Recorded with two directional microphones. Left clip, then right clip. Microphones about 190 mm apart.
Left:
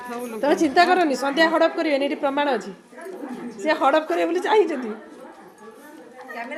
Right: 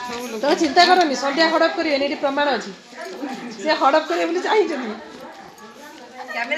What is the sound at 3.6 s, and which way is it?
A woman's voice, 30° left (ahead or behind).